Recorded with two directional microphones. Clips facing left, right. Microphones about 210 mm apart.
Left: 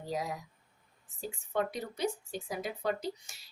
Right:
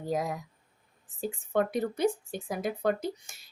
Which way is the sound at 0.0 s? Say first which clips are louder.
Right 5 dB; 50° right (ahead or behind).